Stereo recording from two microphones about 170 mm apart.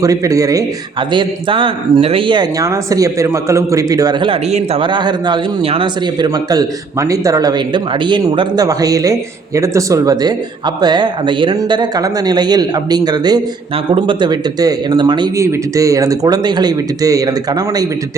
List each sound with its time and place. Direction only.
0.0 s a man's voice: 20° right (ahead or behind)